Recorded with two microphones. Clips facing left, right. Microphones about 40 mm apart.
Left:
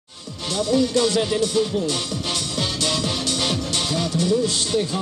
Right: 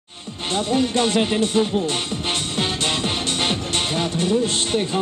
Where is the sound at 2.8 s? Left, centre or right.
Right.